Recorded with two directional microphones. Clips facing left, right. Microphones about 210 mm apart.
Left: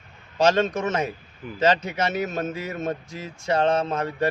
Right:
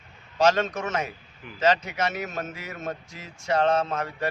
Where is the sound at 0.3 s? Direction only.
30° left (ahead or behind).